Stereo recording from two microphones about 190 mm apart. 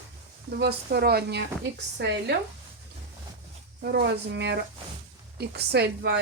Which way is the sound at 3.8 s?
60° right (ahead or behind).